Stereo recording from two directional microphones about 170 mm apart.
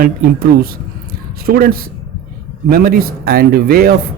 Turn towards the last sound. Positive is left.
turn(degrees=-60)  # may be behind; listen again after turning